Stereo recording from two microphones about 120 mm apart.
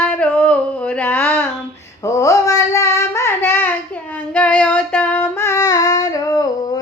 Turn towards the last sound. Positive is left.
turn(degrees=30)  # may be behind; listen again after turning